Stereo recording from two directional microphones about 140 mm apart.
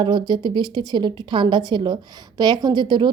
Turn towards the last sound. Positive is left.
turn(degrees=-35)  # may be behind; listen again after turning